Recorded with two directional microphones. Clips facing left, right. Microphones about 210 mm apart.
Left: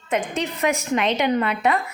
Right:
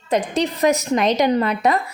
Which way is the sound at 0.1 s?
35° right (ahead or behind).